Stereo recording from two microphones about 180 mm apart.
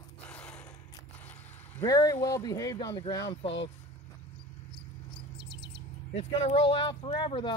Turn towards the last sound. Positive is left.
turn(degrees=25)  # may be behind; listen again after turning